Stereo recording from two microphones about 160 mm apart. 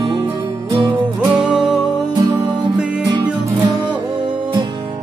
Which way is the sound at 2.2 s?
25° right (ahead or behind).